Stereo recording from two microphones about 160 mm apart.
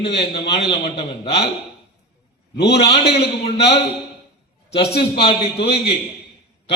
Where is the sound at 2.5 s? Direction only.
90° left.